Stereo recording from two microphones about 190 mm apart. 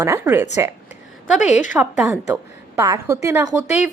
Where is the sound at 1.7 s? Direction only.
5° right (ahead or behind).